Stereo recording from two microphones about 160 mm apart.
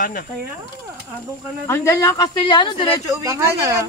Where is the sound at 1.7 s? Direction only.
20° left (ahead or behind).